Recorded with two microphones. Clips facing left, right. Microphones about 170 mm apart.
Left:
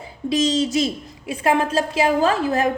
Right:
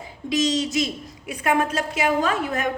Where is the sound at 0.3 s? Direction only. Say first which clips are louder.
Left 3 dB; 30° left (ahead or behind).